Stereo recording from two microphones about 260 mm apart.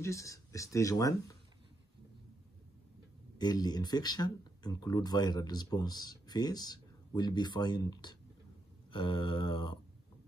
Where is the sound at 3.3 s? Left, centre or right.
Centre.